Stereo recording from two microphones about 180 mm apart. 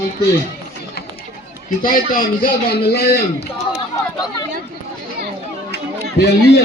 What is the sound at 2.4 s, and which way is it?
Speech, 60° left (ahead or behind).